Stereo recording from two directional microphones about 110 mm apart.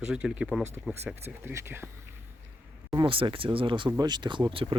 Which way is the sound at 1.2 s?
20° right (ahead or behind).